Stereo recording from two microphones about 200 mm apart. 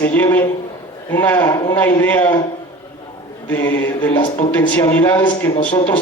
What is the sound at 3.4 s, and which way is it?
A man's voice, 10° left (ahead or behind).